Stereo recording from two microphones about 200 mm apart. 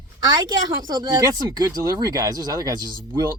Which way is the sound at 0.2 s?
20° right (ahead or behind).